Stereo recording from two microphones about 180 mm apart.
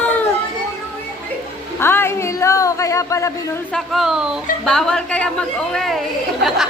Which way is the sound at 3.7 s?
Centre (ahead or behind).